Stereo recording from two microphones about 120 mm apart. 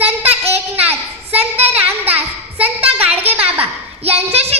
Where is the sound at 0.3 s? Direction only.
55° right (ahead or behind).